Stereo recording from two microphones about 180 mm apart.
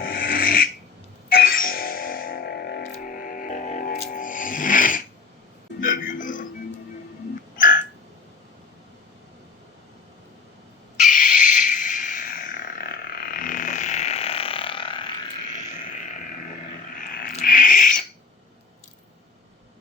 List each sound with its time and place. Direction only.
0.0 s filing: 55° left (ahead or behind)
1.3 s music: 55° left (ahead or behind)
2.8 s music: 50° left (ahead or behind)
7.5 s music: 50° left (ahead or behind)
10.9 s a sound: 45° left (ahead or behind); by 15.1 s 30° left (ahead or behind)
16.9 s a sound: 50° left (ahead or behind)
17.3 s owl: 50° left (ahead or behind)